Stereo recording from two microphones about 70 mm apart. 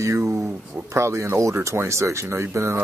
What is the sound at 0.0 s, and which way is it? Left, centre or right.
Speech, right.